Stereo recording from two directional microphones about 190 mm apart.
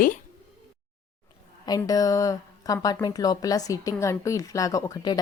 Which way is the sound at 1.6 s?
20° left (ahead or behind).